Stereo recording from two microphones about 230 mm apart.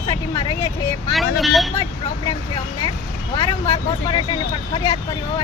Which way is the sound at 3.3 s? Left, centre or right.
Left.